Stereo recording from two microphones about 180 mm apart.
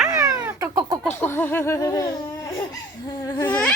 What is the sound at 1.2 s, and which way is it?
Speech, 10° left (ahead or behind).